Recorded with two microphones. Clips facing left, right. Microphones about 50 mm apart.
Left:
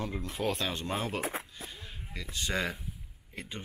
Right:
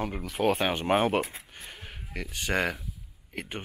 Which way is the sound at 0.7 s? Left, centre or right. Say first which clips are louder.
Right 9 dB; right.